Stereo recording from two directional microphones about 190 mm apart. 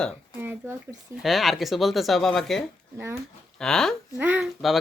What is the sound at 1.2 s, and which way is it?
Speech, centre (ahead or behind).